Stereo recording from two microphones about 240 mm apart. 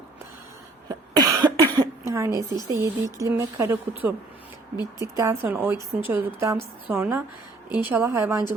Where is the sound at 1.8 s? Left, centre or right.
Centre.